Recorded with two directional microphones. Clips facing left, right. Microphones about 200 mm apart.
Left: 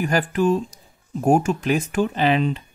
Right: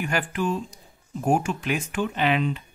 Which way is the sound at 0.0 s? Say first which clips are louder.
Left 6 dB; 40° left (ahead or behind).